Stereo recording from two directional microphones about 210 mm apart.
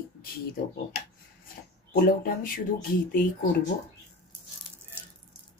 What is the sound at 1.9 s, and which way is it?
Speech, 40° left (ahead or behind).